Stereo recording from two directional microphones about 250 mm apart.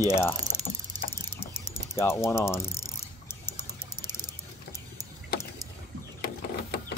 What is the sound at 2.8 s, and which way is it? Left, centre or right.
Vehicle, centre.